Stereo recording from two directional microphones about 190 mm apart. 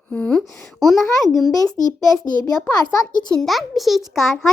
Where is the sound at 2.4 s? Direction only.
20° left (ahead or behind).